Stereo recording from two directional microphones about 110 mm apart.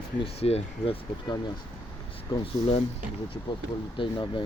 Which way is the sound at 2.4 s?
60° left (ahead or behind).